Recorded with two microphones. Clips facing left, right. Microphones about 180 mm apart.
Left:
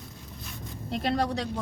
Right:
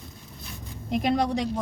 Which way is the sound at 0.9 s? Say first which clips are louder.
Right 4 dB; 10° right (ahead or behind).